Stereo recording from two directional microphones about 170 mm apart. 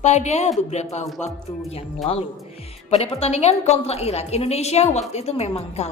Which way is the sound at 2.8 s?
35° left (ahead or behind).